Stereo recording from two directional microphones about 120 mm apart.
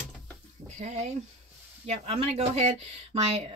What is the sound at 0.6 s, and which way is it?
Speech, 70° right (ahead or behind).